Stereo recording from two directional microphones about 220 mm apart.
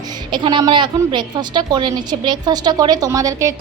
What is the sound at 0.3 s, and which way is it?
A woman's voice, 20° right (ahead or behind).